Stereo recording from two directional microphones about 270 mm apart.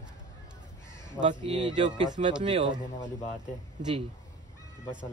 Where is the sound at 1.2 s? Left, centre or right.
Right.